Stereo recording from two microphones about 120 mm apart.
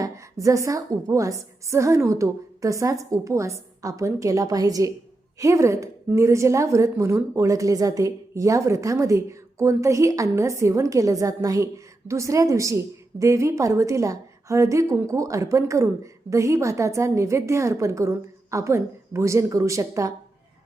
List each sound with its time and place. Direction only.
0.0 s a woman's voice: 25° right (ahead or behind)